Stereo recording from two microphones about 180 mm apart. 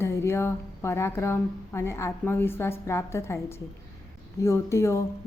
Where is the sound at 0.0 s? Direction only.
15° left (ahead or behind).